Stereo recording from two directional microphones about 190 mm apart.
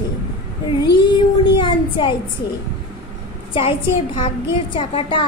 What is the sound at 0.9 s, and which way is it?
Child singing, 25° left (ahead or behind).